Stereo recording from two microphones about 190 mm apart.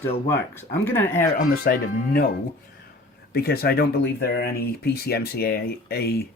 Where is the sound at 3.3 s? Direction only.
55° left (ahead or behind).